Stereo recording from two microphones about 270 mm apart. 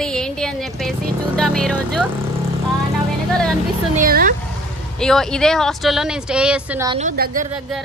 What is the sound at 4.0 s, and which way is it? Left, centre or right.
Speech, right.